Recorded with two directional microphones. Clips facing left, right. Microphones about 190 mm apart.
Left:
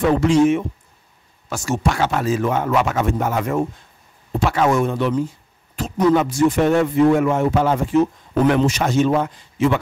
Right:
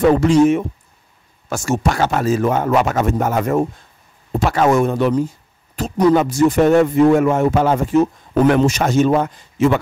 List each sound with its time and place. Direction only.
0.0 s speech: 40° right (ahead or behind)